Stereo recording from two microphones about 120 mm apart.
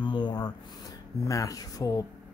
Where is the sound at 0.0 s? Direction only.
40° left (ahead or behind).